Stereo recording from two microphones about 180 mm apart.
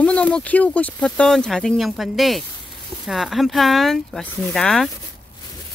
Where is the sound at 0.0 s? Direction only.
5° left (ahead or behind).